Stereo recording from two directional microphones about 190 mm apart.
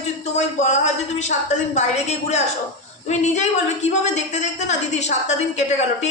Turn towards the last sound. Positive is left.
turn(degrees=35)  # may be behind; listen again after turning